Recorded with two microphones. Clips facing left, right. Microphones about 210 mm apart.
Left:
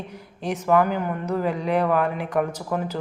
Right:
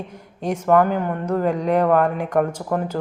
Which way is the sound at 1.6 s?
40° right (ahead or behind).